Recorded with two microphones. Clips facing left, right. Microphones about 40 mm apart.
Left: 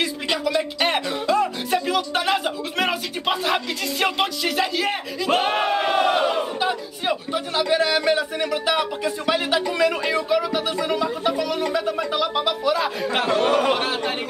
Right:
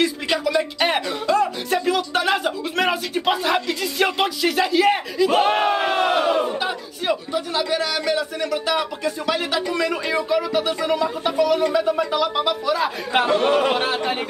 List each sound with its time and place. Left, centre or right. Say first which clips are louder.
0.0 s music: right 3 dB; centre
7.5 s speech: left 4 dB; centre
13.1 s speech: right 2 dB; centre